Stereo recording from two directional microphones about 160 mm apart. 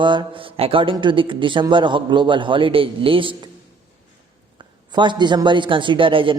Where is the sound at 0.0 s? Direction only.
30° right (ahead or behind).